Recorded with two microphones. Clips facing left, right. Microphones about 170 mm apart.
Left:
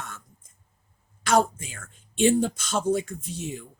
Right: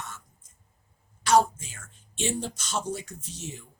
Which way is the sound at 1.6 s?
55° left (ahead or behind).